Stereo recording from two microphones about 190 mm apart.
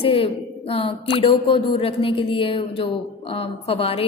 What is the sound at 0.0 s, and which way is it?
A woman's voice, 30° left (ahead or behind).